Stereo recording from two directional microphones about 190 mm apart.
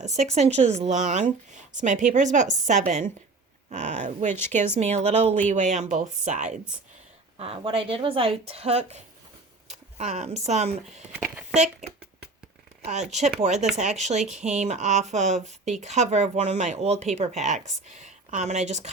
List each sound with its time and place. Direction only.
0.0 s speech: 35° right (ahead or behind)
7.3 s a woman's voice: 30° right (ahead or behind)
10.0 s speech: 35° right (ahead or behind)